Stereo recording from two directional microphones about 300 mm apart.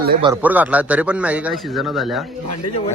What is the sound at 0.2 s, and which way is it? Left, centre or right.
A man's voice, centre.